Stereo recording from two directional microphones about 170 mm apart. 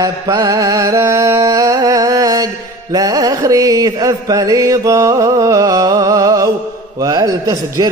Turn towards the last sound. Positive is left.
turn(degrees=-20)  # may be behind; listen again after turning